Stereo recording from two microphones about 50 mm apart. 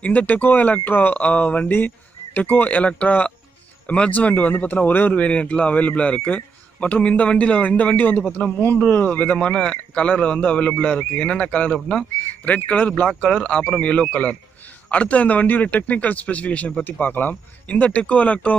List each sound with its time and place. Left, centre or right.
0.0 s a man's voice: left
5.1 s a man's voice: left
9.5 s a man's voice: left
13.4 s a man's voice: centre